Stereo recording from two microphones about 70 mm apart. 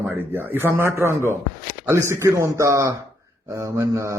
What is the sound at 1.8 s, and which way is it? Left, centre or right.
Mantra, right.